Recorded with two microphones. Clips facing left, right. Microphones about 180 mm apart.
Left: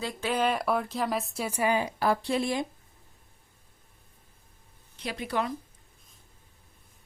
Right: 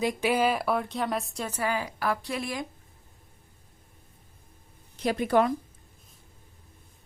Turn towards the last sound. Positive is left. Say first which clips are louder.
# right 8 dB
turn(degrees=-50)  # may be behind; listen again after turning